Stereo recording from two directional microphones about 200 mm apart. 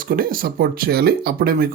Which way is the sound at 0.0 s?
45° right (ahead or behind).